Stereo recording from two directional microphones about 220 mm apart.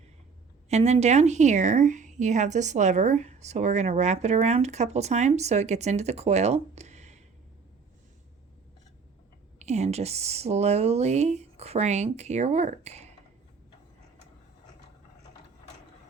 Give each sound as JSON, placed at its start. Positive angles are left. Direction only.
{"t": 0.7, "sound": "a woman's voice", "side_deg": -30}
{"t": 9.6, "sound": "speech", "side_deg": -30}